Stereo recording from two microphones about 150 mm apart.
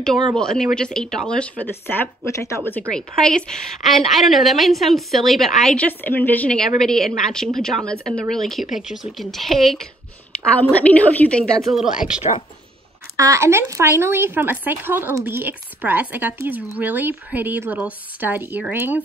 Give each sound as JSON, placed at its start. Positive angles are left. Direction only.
{"t": 0.4, "sound": "a woman's voice", "side_deg": 5}
{"t": 2.9, "sound": "a woman's voice", "side_deg": 5}
{"t": 12.2, "sound": "speech", "side_deg": 45}
{"t": 13.1, "sound": "speech", "side_deg": -20}